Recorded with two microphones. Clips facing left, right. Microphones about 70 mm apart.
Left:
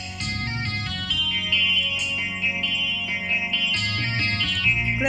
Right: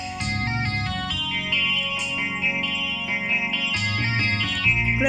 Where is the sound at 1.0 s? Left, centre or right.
Right.